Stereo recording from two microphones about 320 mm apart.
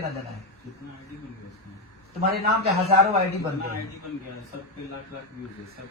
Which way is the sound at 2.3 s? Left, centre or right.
Right.